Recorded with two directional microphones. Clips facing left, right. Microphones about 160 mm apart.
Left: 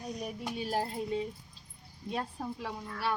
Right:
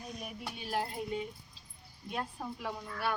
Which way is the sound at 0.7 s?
35° left (ahead or behind).